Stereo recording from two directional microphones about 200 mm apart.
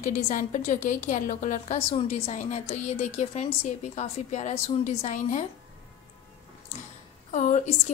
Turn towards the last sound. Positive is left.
turn(degrees=35)  # may be behind; listen again after turning